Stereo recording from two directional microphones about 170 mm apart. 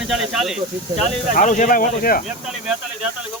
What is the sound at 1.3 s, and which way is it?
Speech, 45° left (ahead or behind).